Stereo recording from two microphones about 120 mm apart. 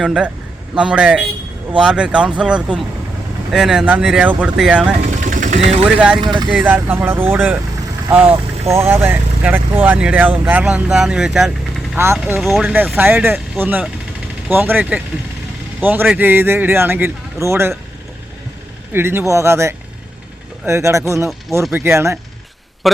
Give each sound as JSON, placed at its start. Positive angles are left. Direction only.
{"t": 0.0, "sound": "speech", "side_deg": -5}
{"t": 5.0, "sound": "vehicle", "side_deg": -85}
{"t": 5.8, "sound": "speech", "side_deg": -10}
{"t": 6.1, "sound": "speech", "side_deg": -40}
{"t": 6.7, "sound": "speech", "side_deg": -15}
{"t": 12.0, "sound": "a man's voice", "side_deg": -20}
{"t": 12.4, "sound": "speech", "side_deg": 0}
{"t": 13.0, "sound": "a man's voice", "side_deg": -15}
{"t": 18.9, "sound": "a man's voice", "side_deg": -20}